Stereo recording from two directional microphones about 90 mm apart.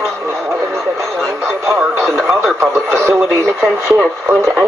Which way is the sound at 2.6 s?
30° right (ahead or behind).